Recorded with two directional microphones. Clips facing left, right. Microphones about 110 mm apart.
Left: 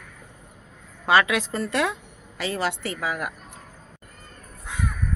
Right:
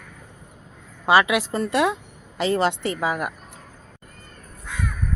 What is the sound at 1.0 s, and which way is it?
A woman's voice, 15° right (ahead or behind).